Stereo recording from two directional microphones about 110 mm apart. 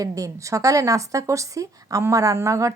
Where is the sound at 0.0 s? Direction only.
30° right (ahead or behind).